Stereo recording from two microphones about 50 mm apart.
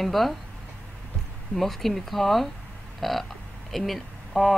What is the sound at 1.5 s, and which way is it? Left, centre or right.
Speech, centre.